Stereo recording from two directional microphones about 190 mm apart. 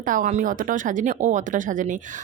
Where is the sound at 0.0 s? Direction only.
45° right (ahead or behind).